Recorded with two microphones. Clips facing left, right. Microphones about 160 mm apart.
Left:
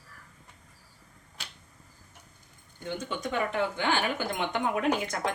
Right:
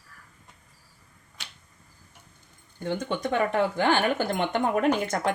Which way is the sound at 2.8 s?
50° right (ahead or behind).